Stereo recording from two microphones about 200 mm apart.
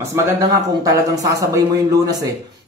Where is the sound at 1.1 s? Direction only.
15° right (ahead or behind).